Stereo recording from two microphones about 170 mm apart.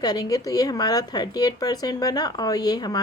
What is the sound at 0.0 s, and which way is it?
A woman's voice, 20° left (ahead or behind).